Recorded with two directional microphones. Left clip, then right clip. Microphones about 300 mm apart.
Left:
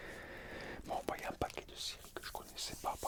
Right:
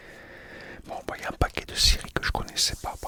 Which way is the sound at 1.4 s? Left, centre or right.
Right.